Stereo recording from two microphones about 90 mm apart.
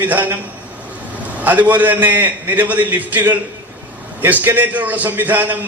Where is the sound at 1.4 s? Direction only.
20° right (ahead or behind).